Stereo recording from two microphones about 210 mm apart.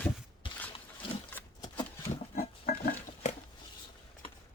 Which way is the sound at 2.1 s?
45° left (ahead or behind).